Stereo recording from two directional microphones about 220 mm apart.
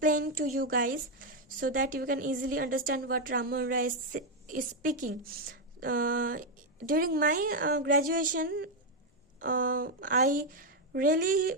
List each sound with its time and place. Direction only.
0.0 s a woman's voice: 40° right (ahead or behind)